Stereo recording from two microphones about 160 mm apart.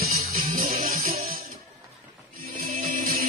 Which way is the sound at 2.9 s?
65° right (ahead or behind).